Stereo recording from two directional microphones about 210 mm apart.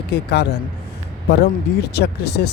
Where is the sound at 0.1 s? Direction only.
50° left (ahead or behind).